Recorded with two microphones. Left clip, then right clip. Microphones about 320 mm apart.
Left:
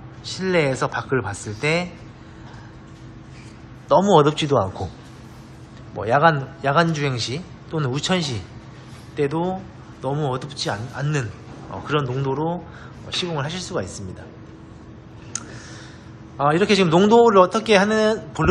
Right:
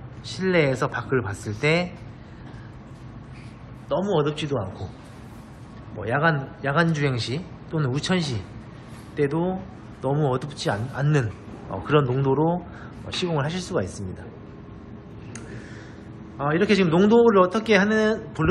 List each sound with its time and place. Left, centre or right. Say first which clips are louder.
0.3 s speech: left 1 dB; centre
3.9 s a man's voice: left 9 dB; centre
5.9 s a man's voice: left 6 dB; centre
16.3 s a man's voice: left 4 dB; centre